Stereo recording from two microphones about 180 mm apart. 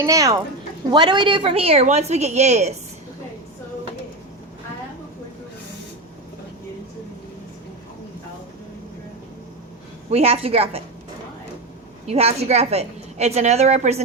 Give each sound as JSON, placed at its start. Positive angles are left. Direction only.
{"t": 0.0, "sound": "a woman's voice", "side_deg": -15}
{"t": 10.1, "sound": "a woman's voice", "side_deg": -35}
{"t": 12.0, "sound": "a woman's voice", "side_deg": -35}